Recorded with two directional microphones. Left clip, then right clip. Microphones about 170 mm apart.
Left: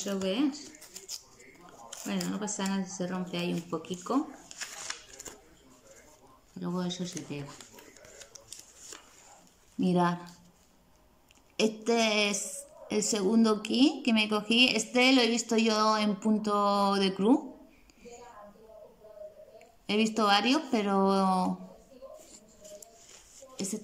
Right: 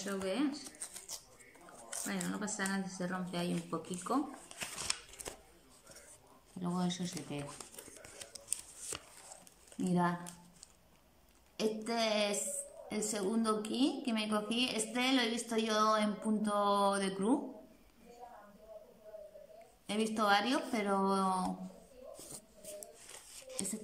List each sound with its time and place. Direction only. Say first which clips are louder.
0.0 s a sound: left 6 dB; 10° left (ahead or behind)
1.9 s speech: left 4 dB; 5° left (ahead or behind)
6.6 s speech: left 3 dB; centre (ahead or behind)
11.5 s a woman's voice: left 8 dB; 10° left (ahead or behind)
19.9 s a woman's voice: left 5 dB; 10° left (ahead or behind)